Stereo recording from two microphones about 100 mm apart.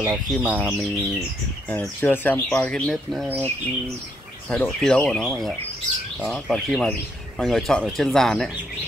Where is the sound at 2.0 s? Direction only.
20° left (ahead or behind).